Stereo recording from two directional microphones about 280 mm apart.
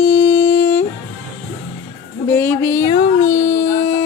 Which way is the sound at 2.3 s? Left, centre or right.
Centre.